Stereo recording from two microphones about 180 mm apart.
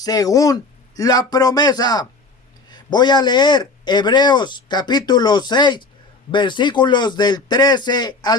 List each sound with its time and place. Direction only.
0.0 s a man's voice: 20° left (ahead or behind)